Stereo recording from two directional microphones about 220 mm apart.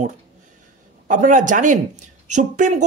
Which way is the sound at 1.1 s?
35° right (ahead or behind).